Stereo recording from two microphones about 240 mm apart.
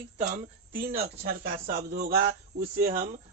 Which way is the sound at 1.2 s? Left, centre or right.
Right.